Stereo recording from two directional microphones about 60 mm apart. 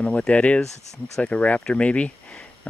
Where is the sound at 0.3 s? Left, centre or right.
Left.